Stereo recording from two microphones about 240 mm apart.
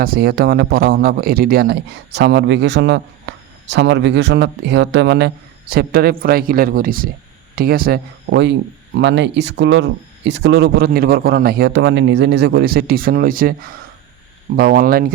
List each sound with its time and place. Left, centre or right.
0.0 s speech: right